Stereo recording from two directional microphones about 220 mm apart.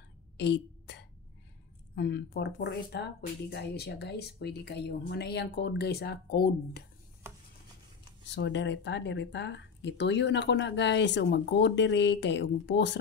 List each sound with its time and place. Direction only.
0.4 s throat clearing: 50° left (ahead or behind)
2.0 s speech: 45° left (ahead or behind)
8.3 s speech: 55° left (ahead or behind)